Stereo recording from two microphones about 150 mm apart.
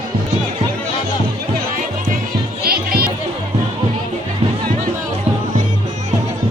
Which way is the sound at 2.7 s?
90° right.